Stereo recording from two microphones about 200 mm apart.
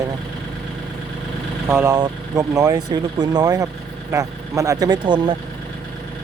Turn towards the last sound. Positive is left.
turn(degrees=-20)  # may be behind; listen again after turning